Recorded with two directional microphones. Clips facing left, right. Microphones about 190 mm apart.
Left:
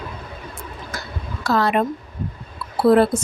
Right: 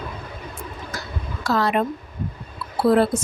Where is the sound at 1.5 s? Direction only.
55° left (ahead or behind).